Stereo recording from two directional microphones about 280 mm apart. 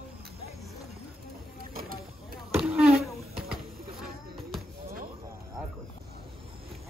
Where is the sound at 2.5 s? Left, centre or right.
Centre.